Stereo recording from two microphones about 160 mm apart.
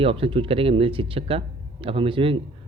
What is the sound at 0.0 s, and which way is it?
Speech, 35° right (ahead or behind).